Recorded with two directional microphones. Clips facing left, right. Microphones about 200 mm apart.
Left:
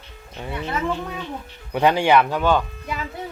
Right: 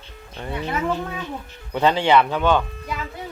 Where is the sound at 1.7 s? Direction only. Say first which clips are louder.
Left 1 dB; 15° left (ahead or behind).